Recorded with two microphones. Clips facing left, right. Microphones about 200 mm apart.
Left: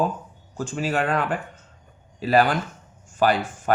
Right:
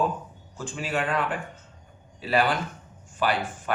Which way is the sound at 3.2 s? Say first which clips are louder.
Left 6 dB; 45° left (ahead or behind).